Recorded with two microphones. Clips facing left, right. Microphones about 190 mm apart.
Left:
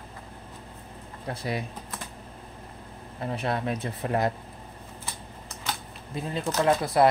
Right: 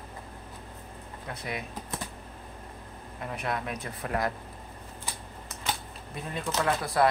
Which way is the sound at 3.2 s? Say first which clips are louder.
Left 4 dB; 30° left (ahead or behind).